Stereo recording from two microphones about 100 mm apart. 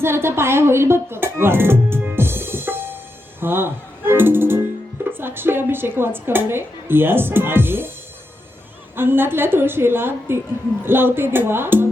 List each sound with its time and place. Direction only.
0.0 s a woman's voice: 25° right (ahead or behind)
9.0 s a woman's voice: 20° right (ahead or behind)